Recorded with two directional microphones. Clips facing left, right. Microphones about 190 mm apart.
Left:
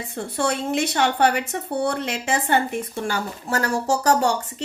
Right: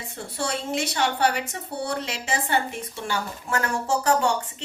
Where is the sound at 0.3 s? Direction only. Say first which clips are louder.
Left 5 dB; 60° left (ahead or behind).